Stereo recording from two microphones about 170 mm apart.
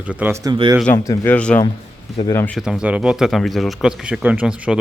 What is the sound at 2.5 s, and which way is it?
Speech, 5° right (ahead or behind).